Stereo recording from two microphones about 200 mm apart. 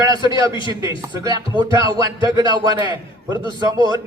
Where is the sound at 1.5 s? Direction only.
25° right (ahead or behind).